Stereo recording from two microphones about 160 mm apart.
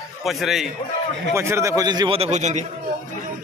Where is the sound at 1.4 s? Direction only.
15° right (ahead or behind).